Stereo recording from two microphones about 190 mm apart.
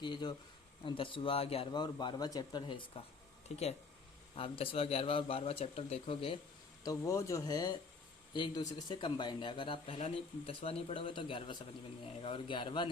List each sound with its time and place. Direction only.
0.0 s speech: 25° left (ahead or behind)
6.8 s speech: 15° left (ahead or behind)